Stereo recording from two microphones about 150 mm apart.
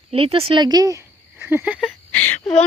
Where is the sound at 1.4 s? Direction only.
15° right (ahead or behind).